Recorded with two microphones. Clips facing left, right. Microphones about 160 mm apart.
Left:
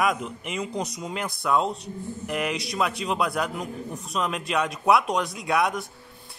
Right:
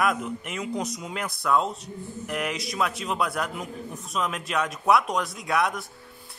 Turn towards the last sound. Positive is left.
turn(degrees=0)  # may be behind; listen again after turning